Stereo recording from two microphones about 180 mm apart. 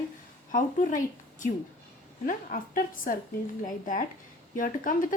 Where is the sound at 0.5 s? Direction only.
45° left (ahead or behind).